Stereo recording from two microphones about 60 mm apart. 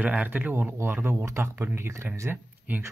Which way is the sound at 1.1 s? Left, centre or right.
Right.